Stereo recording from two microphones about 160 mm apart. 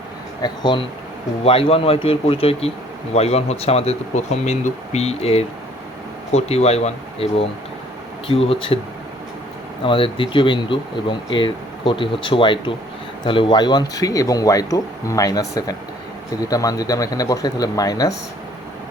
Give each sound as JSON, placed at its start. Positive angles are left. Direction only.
{"t": 0.4, "sound": "speech", "side_deg": 30}
{"t": 9.8, "sound": "speech", "side_deg": 35}